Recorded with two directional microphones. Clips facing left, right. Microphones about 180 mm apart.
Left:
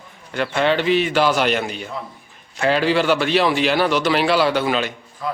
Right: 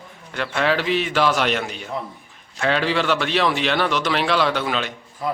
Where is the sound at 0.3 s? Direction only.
Centre (ahead or behind).